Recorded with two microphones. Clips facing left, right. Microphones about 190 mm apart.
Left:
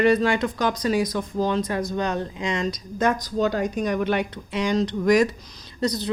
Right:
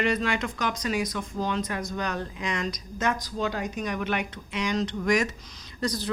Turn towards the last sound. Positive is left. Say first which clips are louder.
# left 5 dB
turn(degrees=20)  # may be behind; listen again after turning